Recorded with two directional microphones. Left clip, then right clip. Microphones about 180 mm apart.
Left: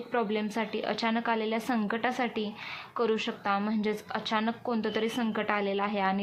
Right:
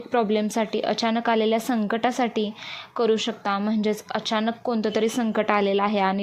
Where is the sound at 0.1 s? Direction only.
35° right (ahead or behind).